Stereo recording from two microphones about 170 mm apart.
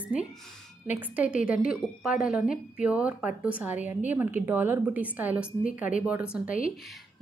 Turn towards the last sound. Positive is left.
turn(degrees=55)  # may be behind; listen again after turning